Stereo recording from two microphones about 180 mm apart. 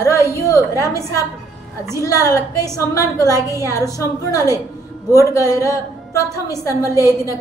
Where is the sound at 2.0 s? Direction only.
15° left (ahead or behind).